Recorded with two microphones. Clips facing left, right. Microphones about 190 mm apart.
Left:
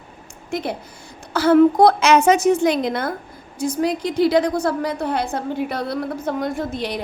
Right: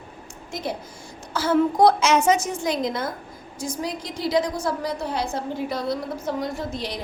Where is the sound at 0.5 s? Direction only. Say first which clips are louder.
Left 5 dB; 60° left (ahead or behind).